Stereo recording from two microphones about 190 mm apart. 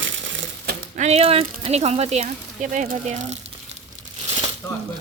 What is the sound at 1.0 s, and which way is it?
Speech, 35° right (ahead or behind).